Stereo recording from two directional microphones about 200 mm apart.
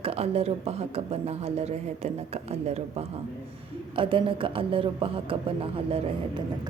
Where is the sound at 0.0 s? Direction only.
30° right (ahead or behind).